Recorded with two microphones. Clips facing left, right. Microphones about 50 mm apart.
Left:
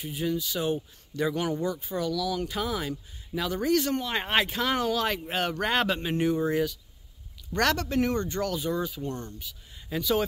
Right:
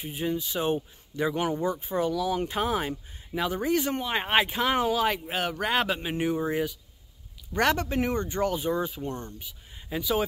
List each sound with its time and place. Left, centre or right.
0.0 s speech: right
9.8 s speech: centre